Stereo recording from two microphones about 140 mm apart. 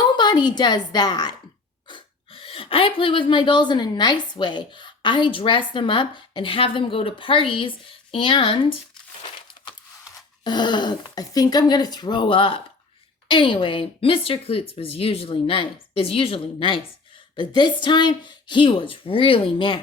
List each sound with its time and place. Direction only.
0.2 s speech: 30° left (ahead or behind)
1.9 s speech: 40° left (ahead or behind)
10.4 s speech: 30° left (ahead or behind)